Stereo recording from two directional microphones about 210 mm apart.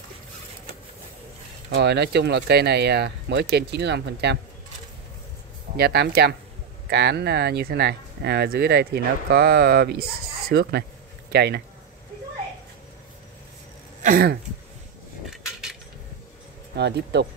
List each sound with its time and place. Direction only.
1.7 s speech: 50° right (ahead or behind)
5.8 s speech: 50° right (ahead or behind)
14.0 s a sound: 45° right (ahead or behind)
15.2 s cutlery: centre (ahead or behind)
16.7 s speech: 55° right (ahead or behind)